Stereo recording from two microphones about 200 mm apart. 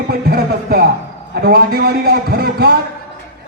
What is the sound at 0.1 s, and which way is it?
Speech, 50° right (ahead or behind).